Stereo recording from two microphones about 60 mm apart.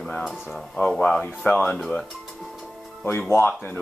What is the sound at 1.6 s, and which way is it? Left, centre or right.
Speech, centre.